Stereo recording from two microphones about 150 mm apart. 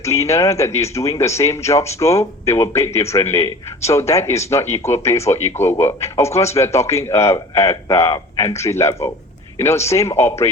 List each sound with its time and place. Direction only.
0.0 s speech: 20° left (ahead or behind)